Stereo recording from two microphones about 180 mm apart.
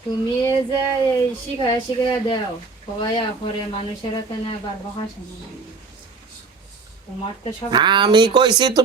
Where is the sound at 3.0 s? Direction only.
30° left (ahead or behind).